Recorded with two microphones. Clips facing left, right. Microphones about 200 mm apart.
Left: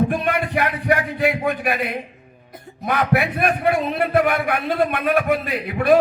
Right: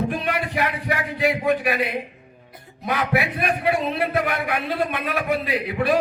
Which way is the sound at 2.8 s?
50° left (ahead or behind).